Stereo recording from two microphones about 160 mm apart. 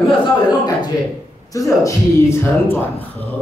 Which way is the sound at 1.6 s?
20° left (ahead or behind).